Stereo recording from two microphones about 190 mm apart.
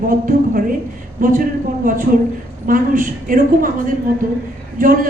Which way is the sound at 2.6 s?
45° right (ahead or behind).